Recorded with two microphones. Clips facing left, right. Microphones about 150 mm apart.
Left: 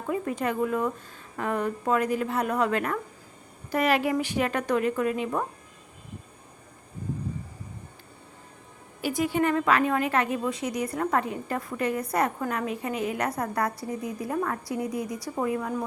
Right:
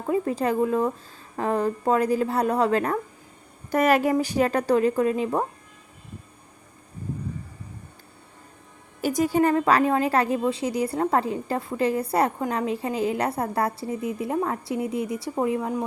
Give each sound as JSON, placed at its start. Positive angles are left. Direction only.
{"t": 0.1, "sound": "a woman's voice", "side_deg": -30}
{"t": 3.7, "sound": "a woman's voice", "side_deg": -45}
{"t": 9.0, "sound": "a woman's voice", "side_deg": -40}